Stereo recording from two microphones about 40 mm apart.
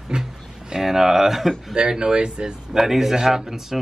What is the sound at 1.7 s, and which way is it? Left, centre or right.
Speech, right.